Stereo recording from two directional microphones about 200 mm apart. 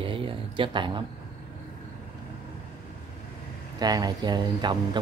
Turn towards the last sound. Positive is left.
turn(degrees=-20)  # may be behind; listen again after turning